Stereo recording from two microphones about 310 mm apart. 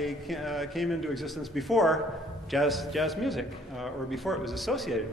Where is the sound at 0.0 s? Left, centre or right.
Centre.